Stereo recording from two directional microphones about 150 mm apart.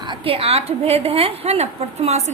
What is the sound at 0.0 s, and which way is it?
A woman's voice, 35° right (ahead or behind).